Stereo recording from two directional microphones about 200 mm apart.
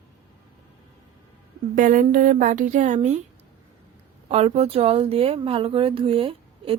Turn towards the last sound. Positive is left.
turn(degrees=-25)  # may be behind; listen again after turning